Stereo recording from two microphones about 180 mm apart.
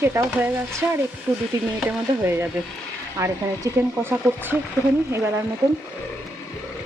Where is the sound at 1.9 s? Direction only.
10° right (ahead or behind).